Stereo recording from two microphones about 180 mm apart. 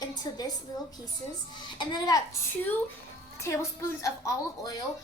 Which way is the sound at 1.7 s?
25° left (ahead or behind).